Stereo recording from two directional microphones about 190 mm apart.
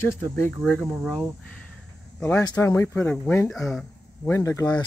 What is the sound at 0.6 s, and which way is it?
Speech, 5° right (ahead or behind).